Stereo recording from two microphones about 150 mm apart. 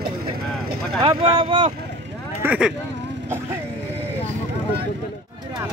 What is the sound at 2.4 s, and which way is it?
Speech, 10° right (ahead or behind).